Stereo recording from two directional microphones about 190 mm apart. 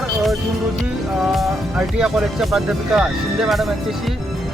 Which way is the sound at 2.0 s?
Centre (ahead or behind).